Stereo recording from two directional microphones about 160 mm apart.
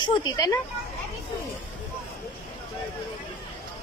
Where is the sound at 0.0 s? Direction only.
25° left (ahead or behind).